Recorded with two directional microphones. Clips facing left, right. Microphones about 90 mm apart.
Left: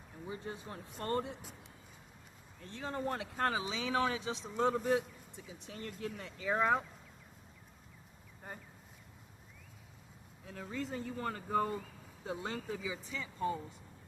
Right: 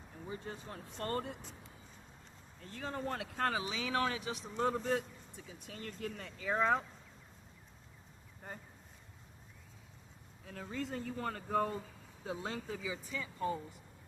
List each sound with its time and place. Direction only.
0.3 s speech: 10° left (ahead or behind)
1.0 s speech: 20° left (ahead or behind)
2.6 s speech: 20° left (ahead or behind)
3.6 s speech: 25° left (ahead or behind)
4.8 s speech: 5° left (ahead or behind)
10.4 s speech: centre (ahead or behind); by 13.5 s 25° left (ahead or behind)